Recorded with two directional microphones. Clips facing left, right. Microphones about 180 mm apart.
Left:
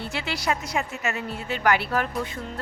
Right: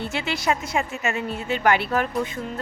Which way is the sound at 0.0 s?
20° right (ahead or behind).